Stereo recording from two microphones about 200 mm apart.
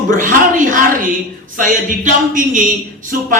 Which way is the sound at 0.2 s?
40° right (ahead or behind).